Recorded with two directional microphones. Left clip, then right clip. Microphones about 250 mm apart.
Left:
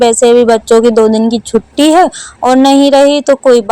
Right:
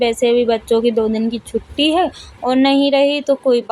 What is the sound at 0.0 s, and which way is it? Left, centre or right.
A woman's voice, left.